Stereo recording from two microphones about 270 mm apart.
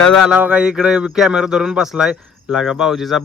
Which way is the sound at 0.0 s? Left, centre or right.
Centre.